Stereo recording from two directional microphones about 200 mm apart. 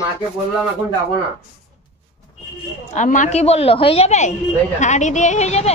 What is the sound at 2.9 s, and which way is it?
Speech, 40° left (ahead or behind).